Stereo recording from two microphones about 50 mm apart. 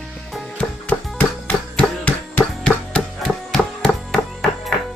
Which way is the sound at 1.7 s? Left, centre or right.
Left.